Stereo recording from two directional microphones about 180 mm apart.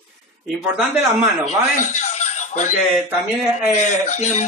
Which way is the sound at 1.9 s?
40° left (ahead or behind).